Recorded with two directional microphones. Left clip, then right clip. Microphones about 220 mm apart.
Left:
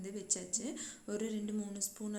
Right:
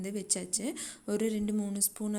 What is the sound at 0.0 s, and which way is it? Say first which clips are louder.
A woman's voice: right 5 dB; 40° right (ahead or behind).